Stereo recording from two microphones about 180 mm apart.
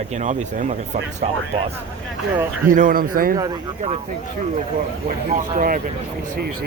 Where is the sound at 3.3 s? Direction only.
20° right (ahead or behind).